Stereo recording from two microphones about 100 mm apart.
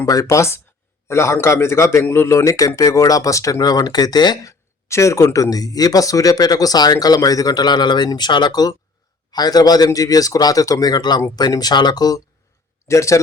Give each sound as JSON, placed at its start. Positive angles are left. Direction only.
{"t": 0.0, "sound": "speech", "side_deg": 35}
{"t": 4.9, "sound": "speech", "side_deg": 30}